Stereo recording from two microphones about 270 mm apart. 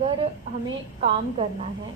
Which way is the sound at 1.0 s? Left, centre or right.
Centre.